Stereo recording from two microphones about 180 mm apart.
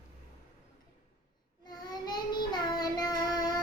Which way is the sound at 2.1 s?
25° left (ahead or behind).